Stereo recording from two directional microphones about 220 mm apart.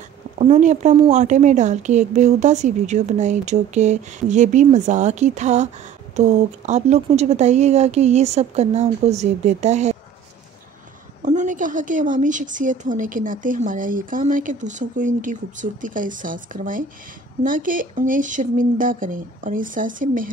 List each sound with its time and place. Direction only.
0.4 s a woman's voice: 30° right (ahead or behind)
11.2 s a woman's voice: 35° right (ahead or behind)